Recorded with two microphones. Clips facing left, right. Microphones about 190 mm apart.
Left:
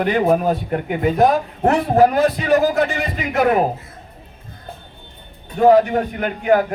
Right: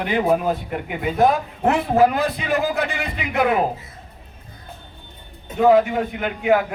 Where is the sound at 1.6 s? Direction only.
40° left (ahead or behind).